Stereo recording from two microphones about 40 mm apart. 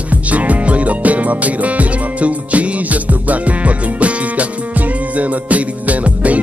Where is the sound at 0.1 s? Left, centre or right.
Right.